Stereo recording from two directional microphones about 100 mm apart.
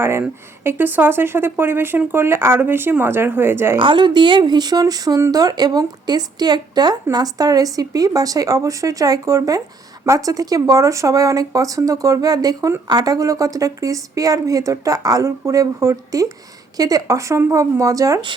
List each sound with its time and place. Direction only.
0.0 s speech: 25° right (ahead or behind)
3.8 s speech: 55° right (ahead or behind); by 18.2 s 35° right (ahead or behind)